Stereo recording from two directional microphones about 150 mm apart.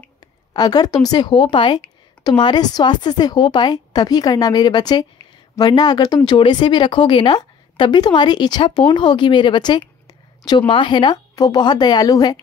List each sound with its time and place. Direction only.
0.5 s a woman's voice: 25° left (ahead or behind)